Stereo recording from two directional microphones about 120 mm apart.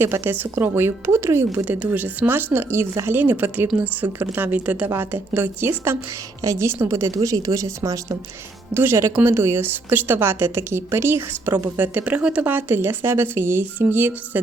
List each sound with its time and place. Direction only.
0.0 s a woman's voice: 20° right (ahead or behind)